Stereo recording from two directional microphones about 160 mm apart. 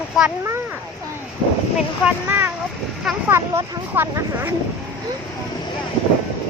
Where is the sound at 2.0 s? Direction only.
15° right (ahead or behind).